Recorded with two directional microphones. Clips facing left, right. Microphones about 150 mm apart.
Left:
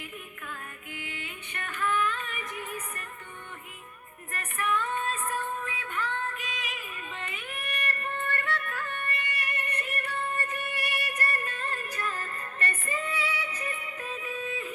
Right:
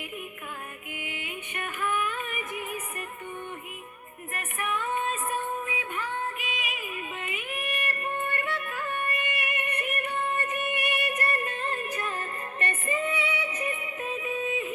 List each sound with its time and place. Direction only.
0.9 s music: 15° right (ahead or behind)
4.3 s music: 15° right (ahead or behind)